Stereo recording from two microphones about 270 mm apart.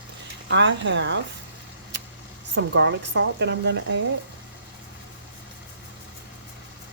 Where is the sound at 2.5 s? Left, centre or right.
Right.